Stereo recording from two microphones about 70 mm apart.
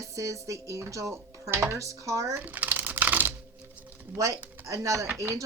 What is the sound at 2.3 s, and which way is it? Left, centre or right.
Typing, right.